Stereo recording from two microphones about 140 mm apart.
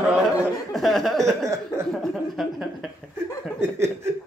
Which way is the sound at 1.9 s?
Centre (ahead or behind).